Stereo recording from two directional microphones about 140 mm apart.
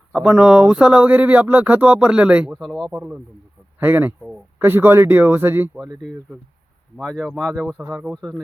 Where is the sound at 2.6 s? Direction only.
5° left (ahead or behind).